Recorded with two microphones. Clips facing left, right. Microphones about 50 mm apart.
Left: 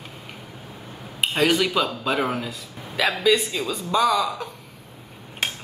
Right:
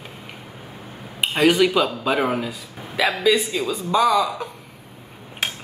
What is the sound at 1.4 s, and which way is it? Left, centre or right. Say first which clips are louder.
A woman's voice: right 4 dB; centre.